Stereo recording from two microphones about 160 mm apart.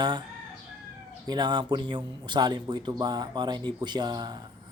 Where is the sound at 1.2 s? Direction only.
25° right (ahead or behind).